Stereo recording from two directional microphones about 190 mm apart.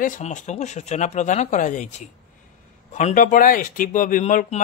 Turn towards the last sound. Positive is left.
turn(degrees=40)  # may be behind; listen again after turning